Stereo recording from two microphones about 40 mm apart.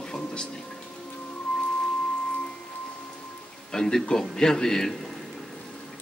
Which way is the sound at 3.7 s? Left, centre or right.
Centre.